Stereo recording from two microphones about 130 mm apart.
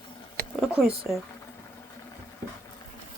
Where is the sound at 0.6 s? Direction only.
5° right (ahead or behind).